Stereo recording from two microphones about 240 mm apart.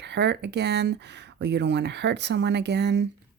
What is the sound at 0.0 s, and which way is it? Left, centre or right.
Speech, right.